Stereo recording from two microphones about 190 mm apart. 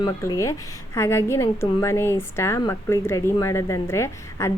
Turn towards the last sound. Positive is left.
turn(degrees=15)  # may be behind; listen again after turning